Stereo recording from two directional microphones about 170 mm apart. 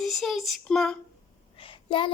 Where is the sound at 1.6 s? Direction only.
30° left (ahead or behind).